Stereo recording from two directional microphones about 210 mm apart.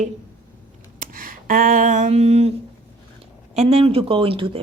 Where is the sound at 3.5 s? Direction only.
30° right (ahead or behind).